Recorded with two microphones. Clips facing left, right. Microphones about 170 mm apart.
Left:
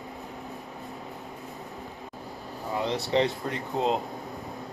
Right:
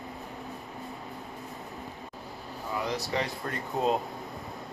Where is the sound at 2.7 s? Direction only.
25° left (ahead or behind).